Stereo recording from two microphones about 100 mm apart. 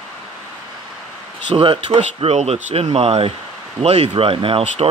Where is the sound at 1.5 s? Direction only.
60° right (ahead or behind).